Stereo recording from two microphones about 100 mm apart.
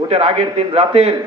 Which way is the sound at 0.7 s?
80° right.